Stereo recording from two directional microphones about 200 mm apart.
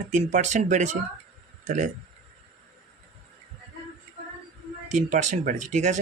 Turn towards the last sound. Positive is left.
turn(degrees=-35)  # may be behind; listen again after turning